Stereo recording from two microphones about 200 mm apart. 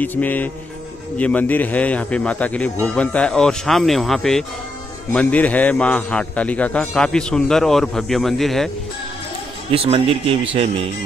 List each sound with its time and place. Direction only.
0.0 s a man's voice: 10° left (ahead or behind)
9.7 s speech: 30° right (ahead or behind)